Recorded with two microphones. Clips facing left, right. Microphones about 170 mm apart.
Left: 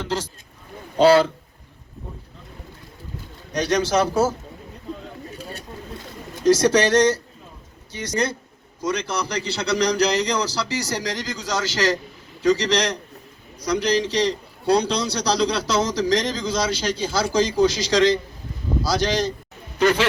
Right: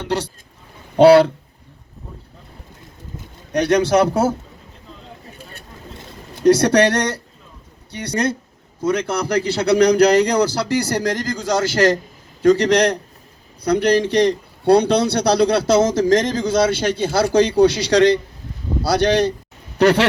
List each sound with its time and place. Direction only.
0.9 s a man's voice: 65° right (ahead or behind)
3.5 s a man's voice: 55° right (ahead or behind)
6.4 s a man's voice: 60° right (ahead or behind)